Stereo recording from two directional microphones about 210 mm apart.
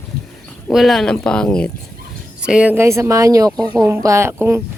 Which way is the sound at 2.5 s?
5° right (ahead or behind).